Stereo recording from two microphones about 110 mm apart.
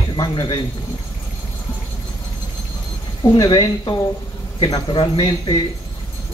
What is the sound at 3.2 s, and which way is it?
A man's voice, 35° left (ahead or behind).